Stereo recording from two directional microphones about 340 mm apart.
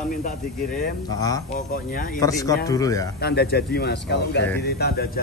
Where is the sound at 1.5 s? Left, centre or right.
Left.